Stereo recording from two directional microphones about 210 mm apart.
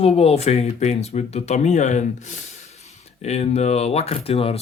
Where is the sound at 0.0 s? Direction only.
30° left (ahead or behind).